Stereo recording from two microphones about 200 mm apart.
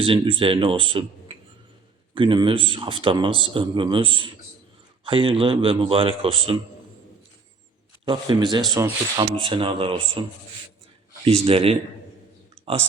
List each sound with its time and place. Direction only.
0.0 s speech: 25° right (ahead or behind)
2.1 s speech: 25° right (ahead or behind)
8.0 s speech: 25° right (ahead or behind)
11.3 s speech: 30° right (ahead or behind)